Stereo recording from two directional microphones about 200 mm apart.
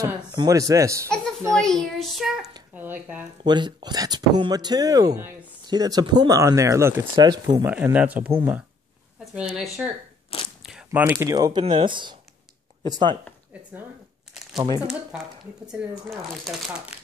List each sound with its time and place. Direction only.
0.0 s speech: 20° right (ahead or behind)
1.5 s a child's voice: 5° left (ahead or behind)
3.4 s speech: 20° right (ahead or behind)
7.7 s speech: 10° right (ahead or behind)
15.6 s speech: 5° right (ahead or behind)